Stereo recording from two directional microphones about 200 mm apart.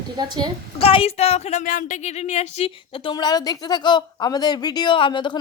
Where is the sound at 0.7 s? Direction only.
30° left (ahead or behind).